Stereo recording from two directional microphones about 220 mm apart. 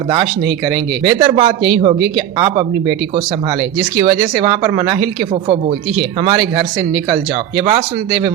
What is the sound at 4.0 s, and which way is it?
A man's voice, 20° right (ahead or behind).